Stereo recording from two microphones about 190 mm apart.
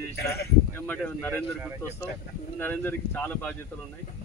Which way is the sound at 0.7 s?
10° left (ahead or behind).